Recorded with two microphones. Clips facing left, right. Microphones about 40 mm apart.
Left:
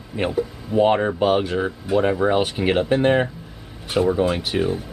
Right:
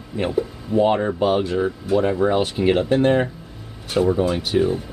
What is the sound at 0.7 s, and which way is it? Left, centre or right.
Speech, centre.